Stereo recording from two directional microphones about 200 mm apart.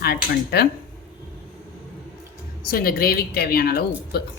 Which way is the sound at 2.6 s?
45° left (ahead or behind).